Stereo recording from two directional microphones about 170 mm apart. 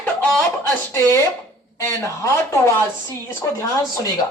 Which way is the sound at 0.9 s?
15° left (ahead or behind).